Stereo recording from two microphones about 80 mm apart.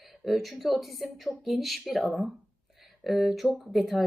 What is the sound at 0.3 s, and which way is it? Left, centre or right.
Speech, centre.